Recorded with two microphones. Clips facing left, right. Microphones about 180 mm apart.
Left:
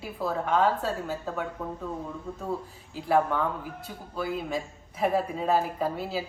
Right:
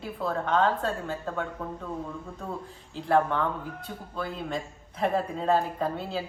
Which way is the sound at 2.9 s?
5° left (ahead or behind).